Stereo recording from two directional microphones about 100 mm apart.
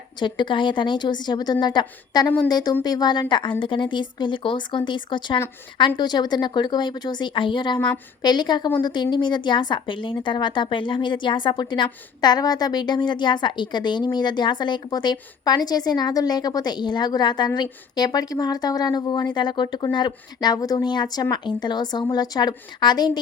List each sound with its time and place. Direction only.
0.2 s a woman's voice: 50° left (ahead or behind)